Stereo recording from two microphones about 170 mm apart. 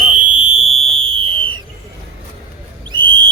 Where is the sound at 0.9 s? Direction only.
30° right (ahead or behind).